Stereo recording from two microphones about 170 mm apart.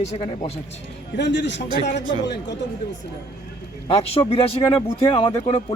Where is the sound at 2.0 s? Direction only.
25° right (ahead or behind).